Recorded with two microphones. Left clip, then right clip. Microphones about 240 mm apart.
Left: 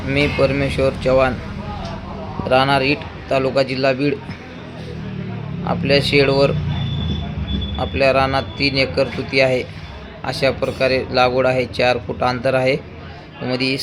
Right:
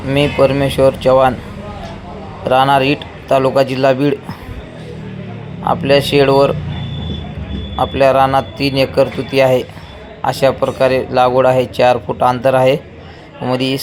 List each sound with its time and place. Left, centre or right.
0.1 s speech: centre
2.5 s speech: centre
5.6 s speech: centre
7.8 s speech: centre